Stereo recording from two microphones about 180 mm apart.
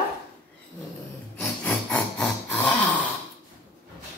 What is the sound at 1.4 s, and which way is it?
Rub, 10° left (ahead or behind).